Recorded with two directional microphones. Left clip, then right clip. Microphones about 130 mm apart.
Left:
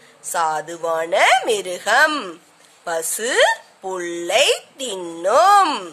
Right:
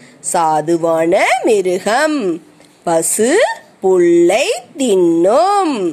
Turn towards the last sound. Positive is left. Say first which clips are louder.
# even
turn(degrees=-30)  # may be behind; listen again after turning